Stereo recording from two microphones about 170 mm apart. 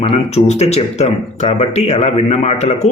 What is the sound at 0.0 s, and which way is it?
Speech, 35° left (ahead or behind).